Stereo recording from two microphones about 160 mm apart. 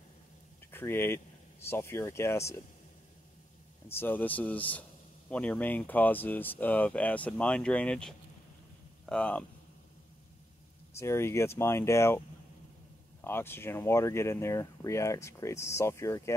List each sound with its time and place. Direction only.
0.7 s speech: 15° left (ahead or behind)
3.9 s speech: 10° left (ahead or behind)
11.0 s speech: 15° left (ahead or behind)
13.2 s speech: 15° left (ahead or behind)